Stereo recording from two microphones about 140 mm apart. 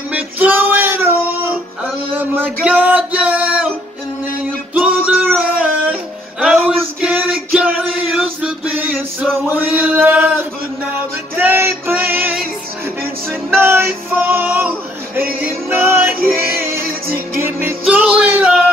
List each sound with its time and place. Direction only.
0.1 s female singing: 15° right (ahead or behind)
2.1 s male singing: 15° right (ahead or behind)
4.7 s music: 10° right (ahead or behind)
6.4 s a sound: 5° right (ahead or behind)
7.5 s music: 10° right (ahead or behind)
9.5 s chant: 15° right (ahead or behind)
11.0 s music: 15° right (ahead or behind)
13.5 s music: 15° right (ahead or behind)